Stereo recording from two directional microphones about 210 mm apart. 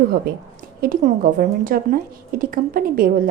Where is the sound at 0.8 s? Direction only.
40° right (ahead or behind).